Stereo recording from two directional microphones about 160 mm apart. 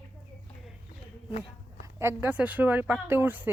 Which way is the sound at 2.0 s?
15° right (ahead or behind).